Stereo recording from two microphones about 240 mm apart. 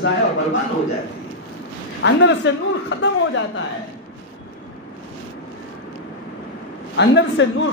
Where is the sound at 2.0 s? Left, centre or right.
Left.